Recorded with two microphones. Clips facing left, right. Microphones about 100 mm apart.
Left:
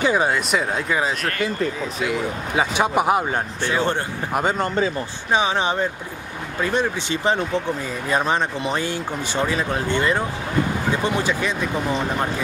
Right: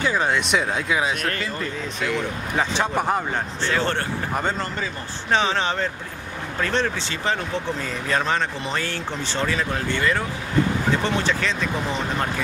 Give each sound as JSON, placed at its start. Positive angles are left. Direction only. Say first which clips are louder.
{"t": 0.0, "sound": "speech", "louder": "left 3 dB", "side_deg": 15}
{"t": 0.3, "sound": "speech", "louder": "even", "side_deg": 5}